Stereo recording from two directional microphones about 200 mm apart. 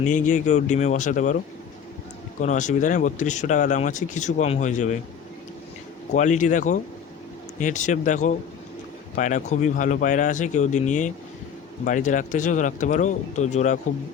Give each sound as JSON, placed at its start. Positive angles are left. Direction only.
{"t": 0.0, "sound": "speech", "side_deg": 40}
{"t": 2.4, "sound": "speech", "side_deg": 35}
{"t": 6.1, "sound": "speech", "side_deg": 35}